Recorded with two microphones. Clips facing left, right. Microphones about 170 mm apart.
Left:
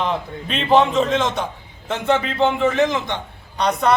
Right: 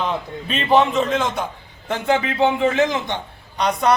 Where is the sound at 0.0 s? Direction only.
Centre (ahead or behind).